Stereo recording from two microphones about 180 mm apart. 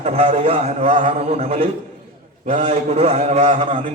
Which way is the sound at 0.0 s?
35° right (ahead or behind).